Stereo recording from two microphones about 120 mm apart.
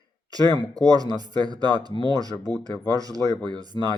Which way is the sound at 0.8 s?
30° right (ahead or behind).